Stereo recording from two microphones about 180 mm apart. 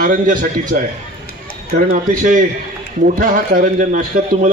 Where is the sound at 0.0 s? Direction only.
50° right (ahead or behind).